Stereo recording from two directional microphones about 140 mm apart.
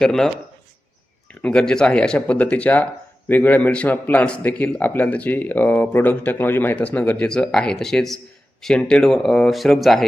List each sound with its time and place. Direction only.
0.0 s speech: 5° left (ahead or behind)
1.3 s speech: 5° left (ahead or behind)